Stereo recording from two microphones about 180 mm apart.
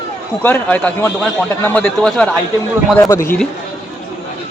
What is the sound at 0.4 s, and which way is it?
Speech, 10° left (ahead or behind).